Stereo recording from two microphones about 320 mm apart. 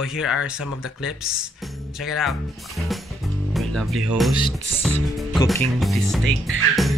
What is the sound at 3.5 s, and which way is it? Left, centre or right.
Music, centre.